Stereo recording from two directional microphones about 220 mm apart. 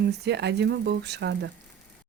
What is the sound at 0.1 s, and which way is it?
A woman's voice, 50° right (ahead or behind).